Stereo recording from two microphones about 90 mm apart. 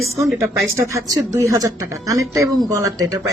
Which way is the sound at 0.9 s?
40° right (ahead or behind).